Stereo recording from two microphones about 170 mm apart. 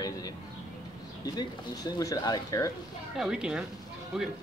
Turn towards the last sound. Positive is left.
turn(degrees=-5)  # may be behind; listen again after turning